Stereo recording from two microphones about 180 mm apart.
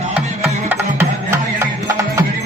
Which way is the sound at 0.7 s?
15° right (ahead or behind).